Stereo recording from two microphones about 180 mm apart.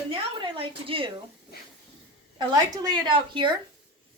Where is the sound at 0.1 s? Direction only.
30° right (ahead or behind).